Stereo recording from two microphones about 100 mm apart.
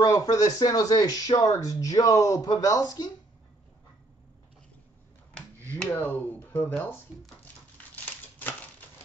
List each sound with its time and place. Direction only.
0.0 s speech: 35° left (ahead or behind)
5.9 s speech: 20° left (ahead or behind)
7.7 s a sound: 15° left (ahead or behind)